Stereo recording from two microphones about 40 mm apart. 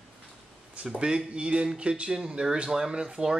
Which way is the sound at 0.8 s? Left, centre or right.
Centre.